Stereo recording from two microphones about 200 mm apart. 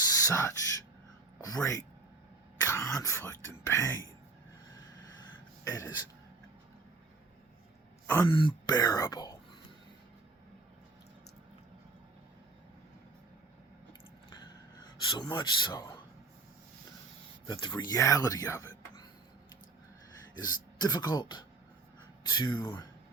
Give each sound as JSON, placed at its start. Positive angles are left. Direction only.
{"t": 0.1, "sound": "a sound", "side_deg": 15}
{"t": 1.5, "sound": "speech", "side_deg": 15}
{"t": 5.6, "sound": "speech", "side_deg": 15}
{"t": 8.0, "sound": "throat clearing", "side_deg": 10}
{"t": 8.3, "sound": "speech", "side_deg": 25}
{"t": 14.8, "sound": "speech", "side_deg": 20}
{"t": 17.4, "sound": "speech", "side_deg": 25}
{"t": 20.4, "sound": "speech", "side_deg": 20}